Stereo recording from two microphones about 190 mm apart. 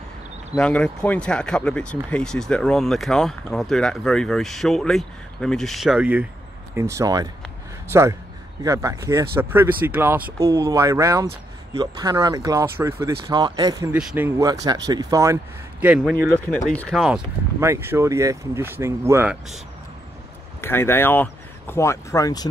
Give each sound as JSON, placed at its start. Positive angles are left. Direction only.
{"t": 0.6, "sound": "speech", "side_deg": 5}
{"t": 16.0, "sound": "speech", "side_deg": 5}
{"t": 20.6, "sound": "speech", "side_deg": 10}